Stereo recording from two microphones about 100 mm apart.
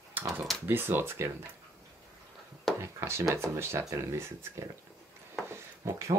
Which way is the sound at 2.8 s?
25° right (ahead or behind).